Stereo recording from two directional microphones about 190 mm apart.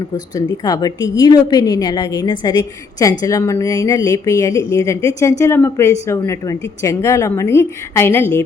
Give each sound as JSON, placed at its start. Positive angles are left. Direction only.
{"t": 0.3, "sound": "a woman's voice", "side_deg": 20}